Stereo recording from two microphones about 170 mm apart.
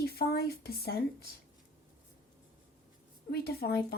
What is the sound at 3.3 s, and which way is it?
Speech, 65° left (ahead or behind).